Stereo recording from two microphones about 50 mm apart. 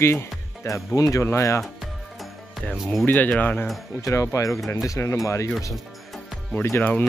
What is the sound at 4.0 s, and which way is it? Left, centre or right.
Speech, left.